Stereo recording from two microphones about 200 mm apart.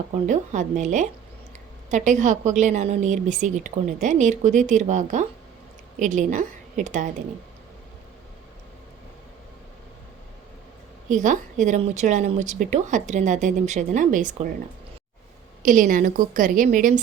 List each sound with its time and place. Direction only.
0.3 s speech: 40° right (ahead or behind)
11.1 s speech: 40° right (ahead or behind)
15.6 s speech: 40° right (ahead or behind)